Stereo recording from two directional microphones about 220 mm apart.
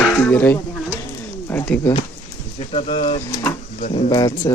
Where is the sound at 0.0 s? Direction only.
5° left (ahead or behind).